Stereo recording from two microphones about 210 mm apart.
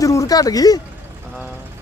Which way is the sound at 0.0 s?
15° left (ahead or behind).